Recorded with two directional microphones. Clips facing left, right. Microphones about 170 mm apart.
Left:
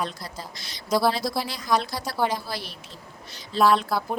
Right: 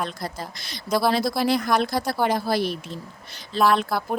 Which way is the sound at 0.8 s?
Centre (ahead or behind).